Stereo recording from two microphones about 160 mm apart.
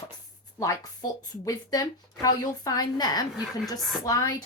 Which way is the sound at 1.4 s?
20° left (ahead or behind).